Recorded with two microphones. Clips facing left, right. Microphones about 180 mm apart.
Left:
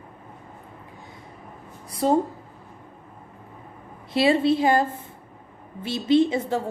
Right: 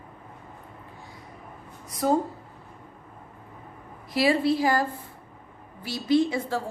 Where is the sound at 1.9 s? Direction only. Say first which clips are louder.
Left 2 dB; 30° left (ahead or behind).